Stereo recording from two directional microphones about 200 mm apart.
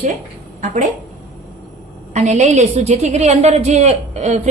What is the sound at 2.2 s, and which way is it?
A woman's voice, 35° right (ahead or behind).